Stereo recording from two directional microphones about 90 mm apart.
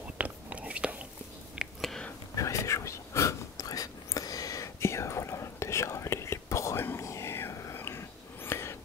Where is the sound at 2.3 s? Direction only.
35° left (ahead or behind).